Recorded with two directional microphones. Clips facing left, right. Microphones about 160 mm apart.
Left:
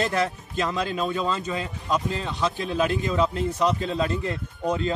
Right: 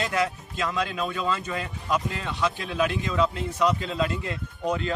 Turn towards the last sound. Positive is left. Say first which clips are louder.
# left 2 dB
turn(degrees=30)  # may be behind; listen again after turning